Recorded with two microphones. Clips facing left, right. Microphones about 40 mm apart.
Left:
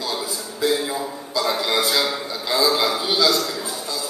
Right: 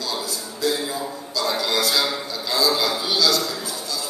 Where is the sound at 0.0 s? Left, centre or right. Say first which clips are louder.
Left 1 dB; centre.